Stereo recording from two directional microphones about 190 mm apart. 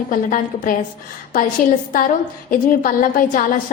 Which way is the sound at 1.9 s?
45° left (ahead or behind).